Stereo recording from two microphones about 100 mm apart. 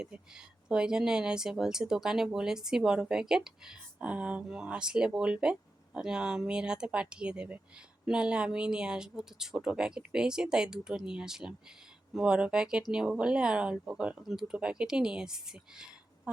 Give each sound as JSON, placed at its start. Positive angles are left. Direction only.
{"t": 0.0, "sound": "speech", "side_deg": -10}